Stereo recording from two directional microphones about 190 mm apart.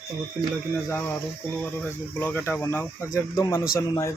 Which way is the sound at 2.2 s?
10° left (ahead or behind).